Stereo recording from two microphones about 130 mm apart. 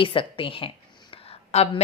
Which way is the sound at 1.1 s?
50° left (ahead or behind).